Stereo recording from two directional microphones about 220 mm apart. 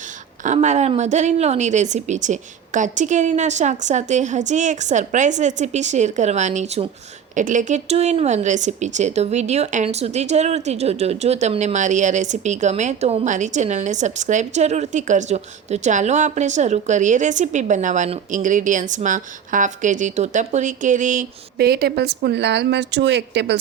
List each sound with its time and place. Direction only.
0.4 s speech: 30° right (ahead or behind); by 23.6 s 50° right (ahead or behind)